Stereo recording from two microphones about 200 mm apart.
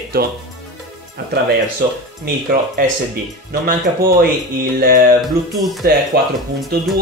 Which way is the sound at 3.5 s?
50° right (ahead or behind).